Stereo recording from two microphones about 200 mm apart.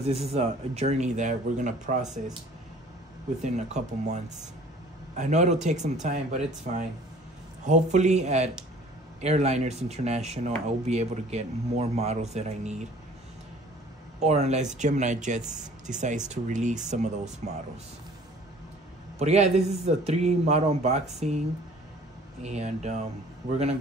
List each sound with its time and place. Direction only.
0.0 s speech: 30° right (ahead or behind)
3.4 s speech: 35° right (ahead or behind)
14.2 s speech: 35° right (ahead or behind)
19.1 s speech: 35° right (ahead or behind)
22.4 s speech: 35° right (ahead or behind)